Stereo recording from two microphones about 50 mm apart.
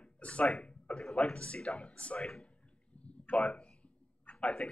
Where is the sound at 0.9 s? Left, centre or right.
Left.